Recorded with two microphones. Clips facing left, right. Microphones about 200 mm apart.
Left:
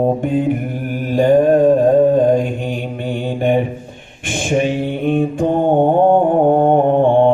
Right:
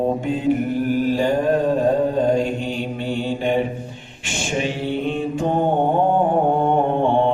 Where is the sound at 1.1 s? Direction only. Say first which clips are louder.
Left 7 dB; 55° left (ahead or behind).